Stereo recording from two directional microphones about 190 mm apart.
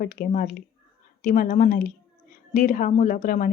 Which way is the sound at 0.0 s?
45° left (ahead or behind).